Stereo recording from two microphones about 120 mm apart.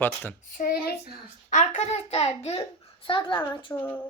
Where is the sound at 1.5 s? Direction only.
85° left; by 2.6 s 60° left (ahead or behind).